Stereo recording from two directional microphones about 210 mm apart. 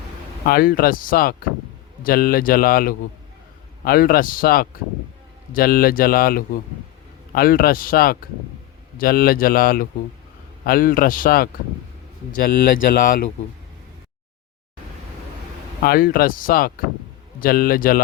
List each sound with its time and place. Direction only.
0.4 s speech: 45° left (ahead or behind)
12.9 s speech: 45° left (ahead or behind)
15.8 s speech: 45° left (ahead or behind)